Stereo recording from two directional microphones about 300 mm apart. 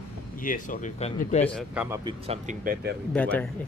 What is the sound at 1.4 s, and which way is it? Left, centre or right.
Speech, centre.